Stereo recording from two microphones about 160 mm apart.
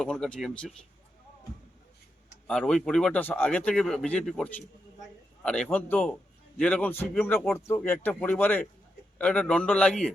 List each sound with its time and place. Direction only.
0.0 s speech: 5° left (ahead or behind)
2.5 s speech: 5° left (ahead or behind)